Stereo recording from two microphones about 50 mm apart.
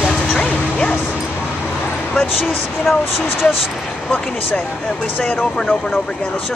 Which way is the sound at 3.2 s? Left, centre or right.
Left.